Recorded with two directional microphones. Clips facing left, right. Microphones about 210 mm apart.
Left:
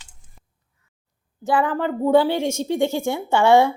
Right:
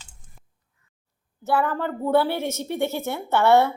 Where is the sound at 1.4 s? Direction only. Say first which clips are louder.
Left 3 dB; 15° left (ahead or behind).